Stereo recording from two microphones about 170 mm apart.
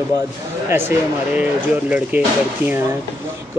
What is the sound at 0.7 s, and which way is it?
Speech, 15° right (ahead or behind).